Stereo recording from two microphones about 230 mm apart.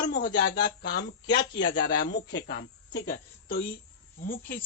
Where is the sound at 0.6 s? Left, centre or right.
Left.